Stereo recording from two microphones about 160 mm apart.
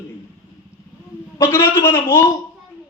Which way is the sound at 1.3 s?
15° left (ahead or behind).